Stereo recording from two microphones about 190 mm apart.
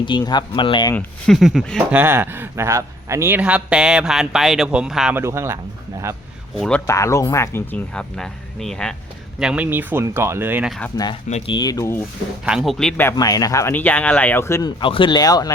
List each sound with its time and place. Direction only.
0.0 s speech: 25° left (ahead or behind)
0.9 s a man's voice: centre (ahead or behind)
2.0 s a man's voice: 10° right (ahead or behind)
5.2 s speech: 15° right (ahead or behind)
6.6 s speech: 5° left (ahead or behind)
10.9 s speech: 20° left (ahead or behind)
11.3 s speech: 30° left (ahead or behind); by 12.0 s 15° left (ahead or behind)
12.5 s a man's voice: centre (ahead or behind)
13.0 s speech: 15° left (ahead or behind)